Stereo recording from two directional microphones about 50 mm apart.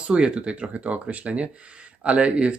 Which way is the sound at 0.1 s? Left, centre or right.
Centre.